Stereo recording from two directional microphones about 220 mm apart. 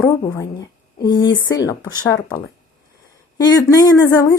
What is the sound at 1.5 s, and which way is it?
Speech, 15° left (ahead or behind).